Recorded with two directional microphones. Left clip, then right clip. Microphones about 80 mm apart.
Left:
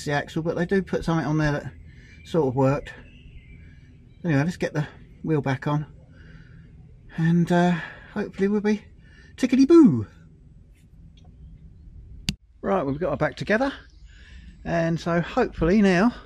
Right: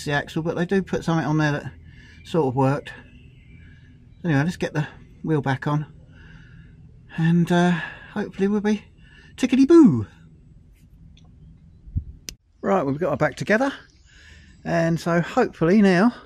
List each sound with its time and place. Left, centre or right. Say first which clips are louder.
0.0 s speech: right 1 dB; centre
4.2 s a woman's voice: right 1 dB; centre
12.5 s speech: right 3 dB; right